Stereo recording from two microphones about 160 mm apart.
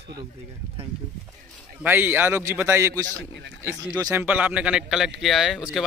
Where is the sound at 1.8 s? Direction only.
10° right (ahead or behind).